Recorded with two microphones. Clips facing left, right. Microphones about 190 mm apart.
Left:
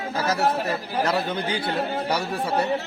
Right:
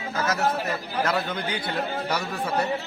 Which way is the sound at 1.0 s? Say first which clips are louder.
Left 2 dB; 30° left (ahead or behind).